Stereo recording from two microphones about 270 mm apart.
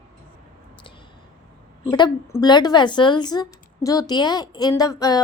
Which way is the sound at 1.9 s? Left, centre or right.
Centre.